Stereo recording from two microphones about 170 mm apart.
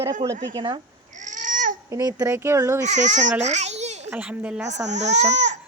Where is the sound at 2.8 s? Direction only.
45° right (ahead or behind).